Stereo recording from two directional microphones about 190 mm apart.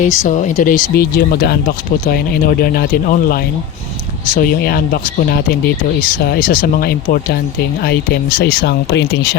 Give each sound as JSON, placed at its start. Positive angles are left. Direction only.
{"t": 0.0, "sound": "speech", "side_deg": 40}